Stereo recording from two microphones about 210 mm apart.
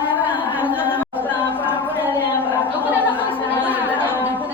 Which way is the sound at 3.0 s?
10° left (ahead or behind).